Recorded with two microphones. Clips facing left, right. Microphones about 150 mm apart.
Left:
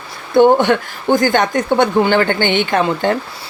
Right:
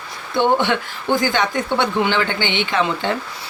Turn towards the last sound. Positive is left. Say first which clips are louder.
# left 5 dB
turn(degrees=50)  # may be behind; listen again after turning